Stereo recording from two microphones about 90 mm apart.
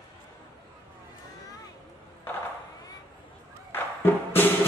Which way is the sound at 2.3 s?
25° left (ahead or behind).